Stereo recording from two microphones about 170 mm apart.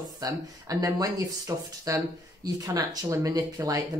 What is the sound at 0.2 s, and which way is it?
Speech, 20° right (ahead or behind).